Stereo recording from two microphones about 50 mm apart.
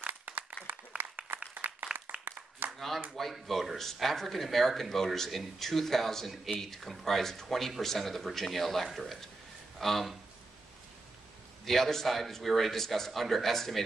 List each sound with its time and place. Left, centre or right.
0.0 s a sound: right
0.9 s applause: right
1.5 s applause: right
2.1 s applause: right
2.6 s a sound: right
3.2 s speech: centre
11.6 s speech: centre